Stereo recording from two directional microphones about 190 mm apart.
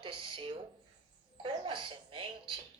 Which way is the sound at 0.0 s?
25° right (ahead or behind).